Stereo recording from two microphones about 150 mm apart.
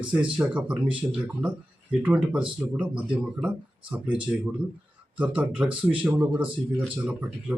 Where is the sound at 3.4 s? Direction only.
10° right (ahead or behind).